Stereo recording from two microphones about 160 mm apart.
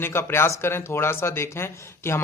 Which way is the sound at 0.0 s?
15° left (ahead or behind).